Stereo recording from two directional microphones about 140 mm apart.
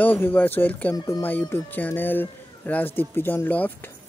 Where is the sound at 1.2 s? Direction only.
15° left (ahead or behind).